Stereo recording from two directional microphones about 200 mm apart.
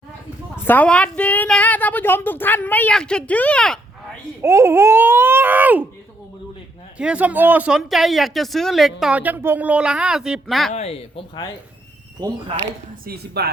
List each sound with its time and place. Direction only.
0.6 s a woman's voice: 10° left (ahead or behind)
4.4 s speech: 15° right (ahead or behind)
7.0 s speech: 5° right (ahead or behind)
10.7 s speech: 35° left (ahead or behind)
13.1 s speech: 50° right (ahead or behind)